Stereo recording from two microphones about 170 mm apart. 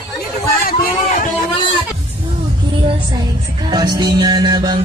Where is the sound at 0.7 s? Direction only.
55° left (ahead or behind).